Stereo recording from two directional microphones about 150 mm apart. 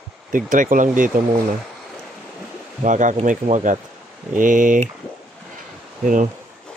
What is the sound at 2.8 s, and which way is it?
Speech, 55° right (ahead or behind).